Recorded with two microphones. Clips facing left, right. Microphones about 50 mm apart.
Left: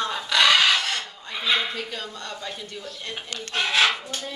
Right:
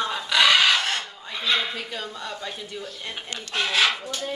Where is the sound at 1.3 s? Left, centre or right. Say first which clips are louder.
Left 1 dB; centre.